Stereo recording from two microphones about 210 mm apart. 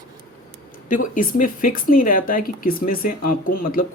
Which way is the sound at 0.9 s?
40° left (ahead or behind).